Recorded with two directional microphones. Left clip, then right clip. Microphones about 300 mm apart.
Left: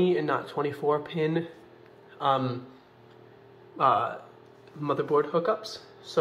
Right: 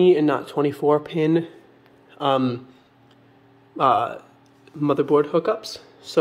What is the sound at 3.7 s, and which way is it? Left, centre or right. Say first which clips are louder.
A man's voice: right 5 dB; right.